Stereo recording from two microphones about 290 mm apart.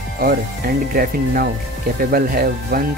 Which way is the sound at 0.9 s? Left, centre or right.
Right.